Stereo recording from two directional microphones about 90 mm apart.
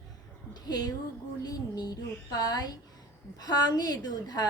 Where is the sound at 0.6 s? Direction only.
45° left (ahead or behind).